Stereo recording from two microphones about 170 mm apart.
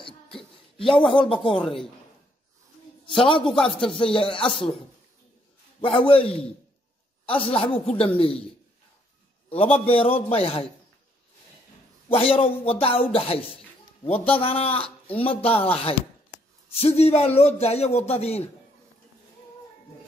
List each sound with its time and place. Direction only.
0.4 s a sound: 30° left (ahead or behind)
1.1 s speech: 30° left (ahead or behind)
3.1 s speech: 30° left (ahead or behind)
5.8 s speech: 30° left (ahead or behind)
9.5 s speech: 35° left (ahead or behind)
12.1 s speech: 35° left (ahead or behind)